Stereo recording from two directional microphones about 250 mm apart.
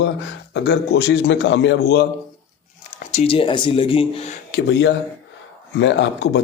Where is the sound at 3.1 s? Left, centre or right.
Left.